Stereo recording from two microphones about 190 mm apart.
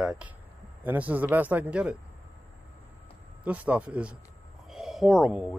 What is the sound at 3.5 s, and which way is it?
Speech, 5° right (ahead or behind).